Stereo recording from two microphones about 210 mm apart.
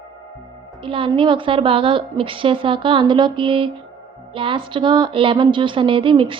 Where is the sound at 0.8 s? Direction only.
25° right (ahead or behind).